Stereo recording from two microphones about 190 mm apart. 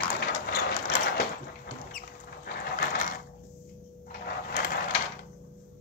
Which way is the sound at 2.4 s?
45° left (ahead or behind).